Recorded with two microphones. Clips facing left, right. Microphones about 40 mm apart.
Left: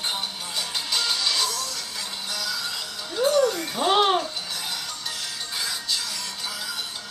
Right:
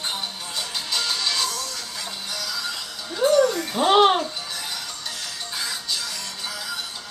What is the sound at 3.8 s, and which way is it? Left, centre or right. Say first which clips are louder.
Music: right 4 dB; right.